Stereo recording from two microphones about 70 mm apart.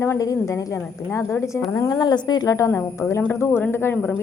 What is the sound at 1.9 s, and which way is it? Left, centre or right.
Speech, left.